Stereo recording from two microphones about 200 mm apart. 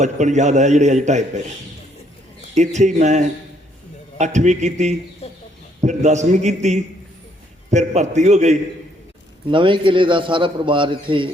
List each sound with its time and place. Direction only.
0.0 s a man's voice: 35° right (ahead or behind)
2.6 s a man's voice: 35° right (ahead or behind)
5.2 s chicken: 30° left (ahead or behind)
5.8 s a man's voice: 35° right (ahead or behind)
9.5 s a man's voice: 25° right (ahead or behind)